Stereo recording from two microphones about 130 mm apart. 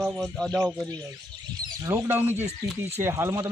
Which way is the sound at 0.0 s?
5° left (ahead or behind).